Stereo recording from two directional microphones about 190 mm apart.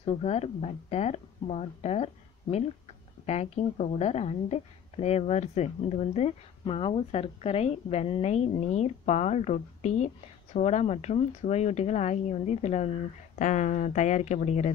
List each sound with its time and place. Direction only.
0.0 s speech: 35° left (ahead or behind)
3.3 s speech: 35° left (ahead or behind)